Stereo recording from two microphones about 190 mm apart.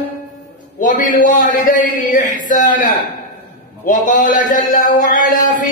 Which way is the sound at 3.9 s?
45° left (ahead or behind).